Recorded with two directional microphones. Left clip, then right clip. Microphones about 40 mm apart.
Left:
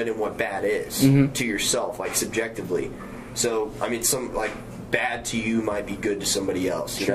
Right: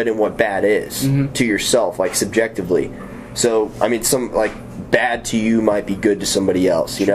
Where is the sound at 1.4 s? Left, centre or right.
Right.